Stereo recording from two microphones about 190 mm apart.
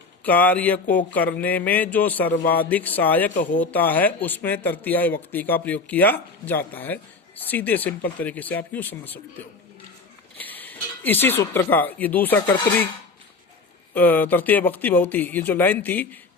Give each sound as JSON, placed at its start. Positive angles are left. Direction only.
{"t": 0.3, "sound": "speech", "side_deg": 10}
{"t": 10.3, "sound": "speech", "side_deg": 10}
{"t": 13.9, "sound": "speech", "side_deg": 10}